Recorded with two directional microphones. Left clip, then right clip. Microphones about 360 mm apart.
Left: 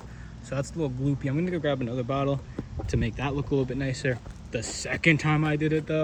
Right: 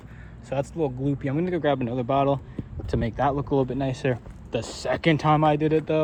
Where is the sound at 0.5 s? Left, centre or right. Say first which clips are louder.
Right 5 dB; centre.